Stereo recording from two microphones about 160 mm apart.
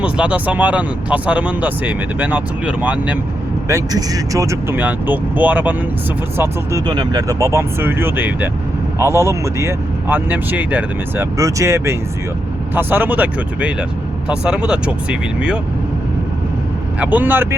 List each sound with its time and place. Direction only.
0.0 s speech: 10° right (ahead or behind)
3.7 s speech: 20° right (ahead or behind)
6.8 s speech: 25° right (ahead or behind); by 15.5 s 5° right (ahead or behind)
17.0 s speech: 10° right (ahead or behind)